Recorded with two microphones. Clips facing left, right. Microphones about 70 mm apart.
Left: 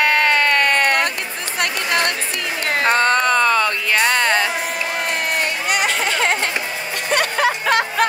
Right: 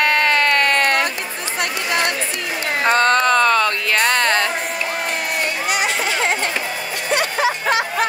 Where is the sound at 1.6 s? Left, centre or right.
Left.